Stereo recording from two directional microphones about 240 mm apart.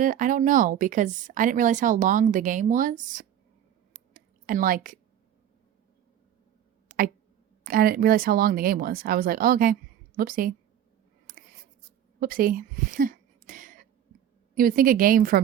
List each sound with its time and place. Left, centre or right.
0.0 s speech: right
4.1 s a sound: right
7.6 s speech: right
11.3 s writing: right
12.2 s a sound: right
14.5 s speech: right